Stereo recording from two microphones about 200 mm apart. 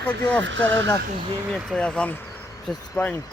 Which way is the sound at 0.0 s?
5° left (ahead or behind).